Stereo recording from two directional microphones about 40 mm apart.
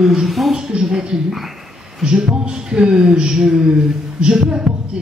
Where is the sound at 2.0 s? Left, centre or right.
Right.